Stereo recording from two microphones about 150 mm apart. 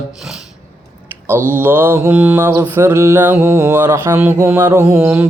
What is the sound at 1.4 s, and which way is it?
Mantra, 15° right (ahead or behind).